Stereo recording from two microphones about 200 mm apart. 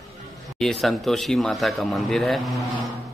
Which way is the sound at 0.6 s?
Centre (ahead or behind).